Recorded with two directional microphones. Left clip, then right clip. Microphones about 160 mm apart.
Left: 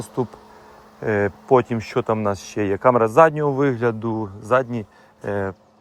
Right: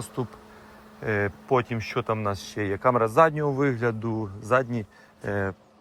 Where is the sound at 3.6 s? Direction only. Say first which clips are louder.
Left 5 dB; 50° left (ahead or behind).